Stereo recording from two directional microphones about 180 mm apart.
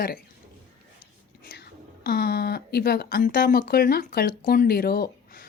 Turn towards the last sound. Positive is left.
turn(degrees=55)  # may be behind; listen again after turning